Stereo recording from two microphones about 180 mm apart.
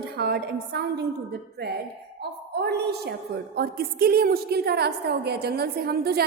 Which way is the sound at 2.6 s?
65° right (ahead or behind).